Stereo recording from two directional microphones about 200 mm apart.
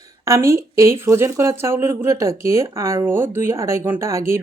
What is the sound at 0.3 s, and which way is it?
A woman's voice, 15° right (ahead or behind).